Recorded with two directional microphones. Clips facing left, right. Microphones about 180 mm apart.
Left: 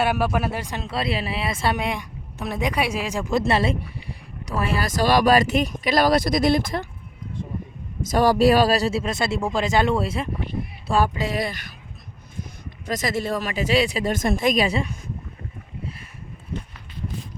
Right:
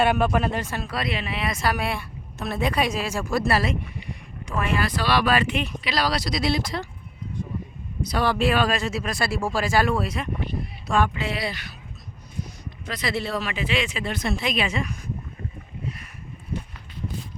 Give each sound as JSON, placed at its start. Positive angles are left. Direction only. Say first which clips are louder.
{"t": 0.0, "sound": "speech", "louder": "right 1 dB", "side_deg": 5}
{"t": 8.0, "sound": "speech", "louder": "left 6 dB", "side_deg": 45}
{"t": 12.9, "sound": "speech", "louder": "left 3 dB", "side_deg": 45}